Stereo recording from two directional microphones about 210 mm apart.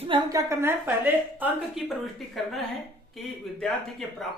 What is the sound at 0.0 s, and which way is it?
A woman's voice, 20° right (ahead or behind).